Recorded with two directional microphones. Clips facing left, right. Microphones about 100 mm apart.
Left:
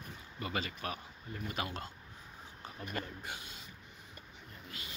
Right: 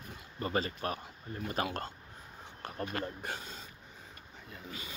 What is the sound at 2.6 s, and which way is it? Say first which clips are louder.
Speech: right 5 dB; 60° right (ahead or behind).